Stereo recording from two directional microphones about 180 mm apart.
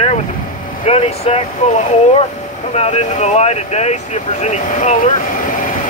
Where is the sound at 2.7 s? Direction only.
40° left (ahead or behind).